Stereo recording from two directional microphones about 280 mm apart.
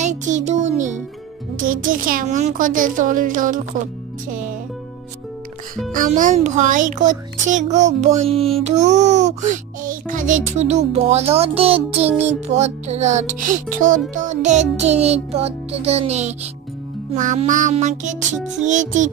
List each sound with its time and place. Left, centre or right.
0.0 s music: right
1.6 s a child's voice: right
5.9 s a child's voice: right